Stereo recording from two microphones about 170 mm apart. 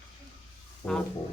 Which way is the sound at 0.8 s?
15° left (ahead or behind).